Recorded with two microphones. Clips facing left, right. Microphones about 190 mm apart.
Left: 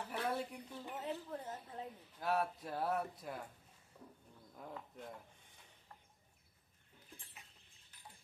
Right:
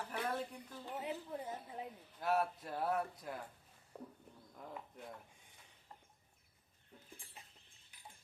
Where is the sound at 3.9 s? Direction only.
65° right (ahead or behind).